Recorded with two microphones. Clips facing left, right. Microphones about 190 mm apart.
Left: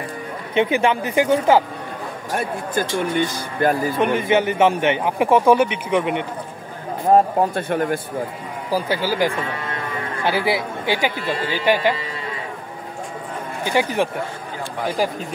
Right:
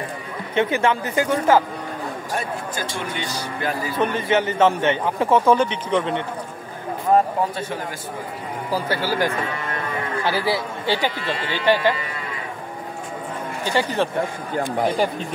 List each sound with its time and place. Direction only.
0.6 s a man's voice: 15° left (ahead or behind)
2.3 s speech: 55° left (ahead or behind)
4.0 s a man's voice: 15° left (ahead or behind)
7.5 s a man's voice: 60° left (ahead or behind)
8.6 s a man's voice: 10° left (ahead or behind)
13.7 s a man's voice: 15° left (ahead or behind)